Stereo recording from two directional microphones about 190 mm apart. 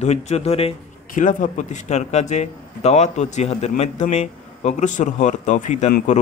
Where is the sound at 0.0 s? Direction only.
35° left (ahead or behind).